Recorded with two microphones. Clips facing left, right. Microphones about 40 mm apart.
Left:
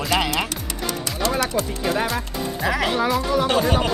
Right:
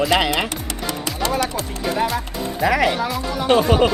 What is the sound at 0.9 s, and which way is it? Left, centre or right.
Music, right.